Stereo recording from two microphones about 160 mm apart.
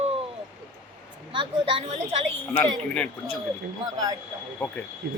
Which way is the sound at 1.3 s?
35° right (ahead or behind).